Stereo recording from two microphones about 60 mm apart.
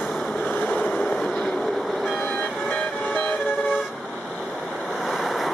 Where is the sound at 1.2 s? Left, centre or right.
Centre.